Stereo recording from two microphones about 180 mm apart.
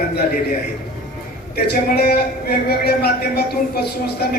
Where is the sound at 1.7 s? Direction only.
60° left (ahead or behind).